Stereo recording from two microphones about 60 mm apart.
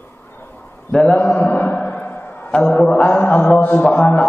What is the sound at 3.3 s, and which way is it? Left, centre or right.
Mantra, left.